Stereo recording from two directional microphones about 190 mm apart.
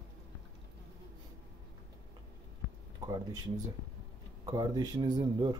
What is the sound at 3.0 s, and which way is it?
Speech, 20° right (ahead or behind).